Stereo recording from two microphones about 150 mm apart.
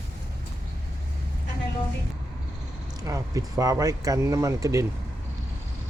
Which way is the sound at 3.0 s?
20° right (ahead or behind).